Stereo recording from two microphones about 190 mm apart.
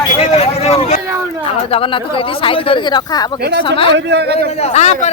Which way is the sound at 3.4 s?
60° right (ahead or behind).